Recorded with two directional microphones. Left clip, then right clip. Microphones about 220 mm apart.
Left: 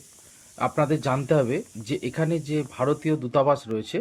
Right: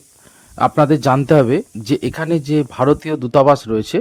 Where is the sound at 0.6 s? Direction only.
50° right (ahead or behind).